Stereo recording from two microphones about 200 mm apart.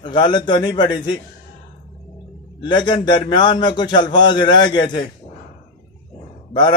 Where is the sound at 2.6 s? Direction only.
20° left (ahead or behind).